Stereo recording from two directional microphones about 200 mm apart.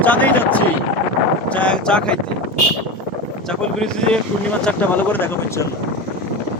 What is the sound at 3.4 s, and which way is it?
Speech, 5° left (ahead or behind).